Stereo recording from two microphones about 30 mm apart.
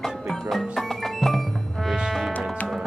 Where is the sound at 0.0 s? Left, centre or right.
Centre.